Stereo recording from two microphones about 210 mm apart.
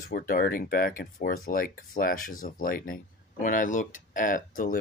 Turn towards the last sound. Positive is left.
turn(degrees=40)  # may be behind; listen again after turning